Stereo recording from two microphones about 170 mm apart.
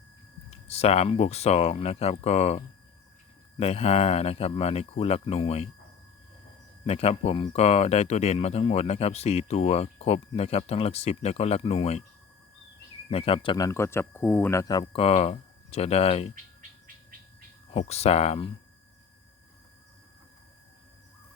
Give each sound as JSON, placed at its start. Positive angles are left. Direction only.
{"t": 0.5, "sound": "speech", "side_deg": 40}
{"t": 6.8, "sound": "speech", "side_deg": 35}
{"t": 13.1, "sound": "speech", "side_deg": 35}
{"t": 13.7, "sound": "speech", "side_deg": 15}
{"t": 16.3, "sound": "bird", "side_deg": -50}
{"t": 17.7, "sound": "speech", "side_deg": 35}